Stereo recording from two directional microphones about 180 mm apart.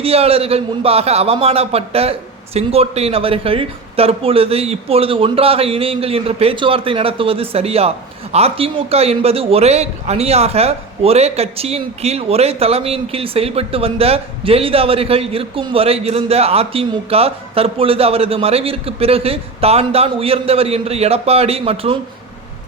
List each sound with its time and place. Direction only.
0.0 s a man's voice: 35° right (ahead or behind)